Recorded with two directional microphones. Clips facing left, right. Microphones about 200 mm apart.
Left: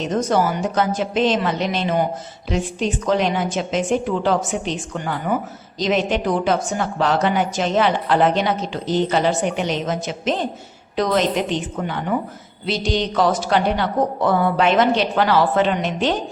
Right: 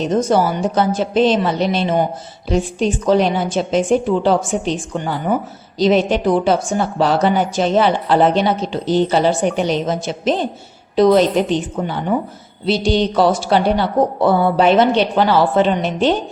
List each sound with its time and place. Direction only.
0.0 s a woman's voice: 30° right (ahead or behind)